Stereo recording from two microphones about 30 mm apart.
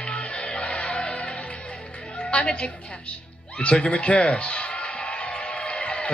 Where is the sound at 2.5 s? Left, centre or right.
Left.